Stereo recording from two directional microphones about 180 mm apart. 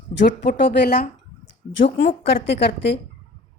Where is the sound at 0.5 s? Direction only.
75° left (ahead or behind).